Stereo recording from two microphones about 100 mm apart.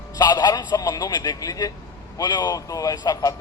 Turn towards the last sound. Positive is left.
turn(degrees=40)  # may be behind; listen again after turning